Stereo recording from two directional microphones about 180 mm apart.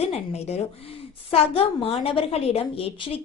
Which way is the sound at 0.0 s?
35° left (ahead or behind).